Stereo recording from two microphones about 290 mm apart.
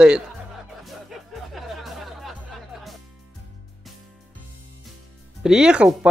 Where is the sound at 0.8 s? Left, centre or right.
Centre.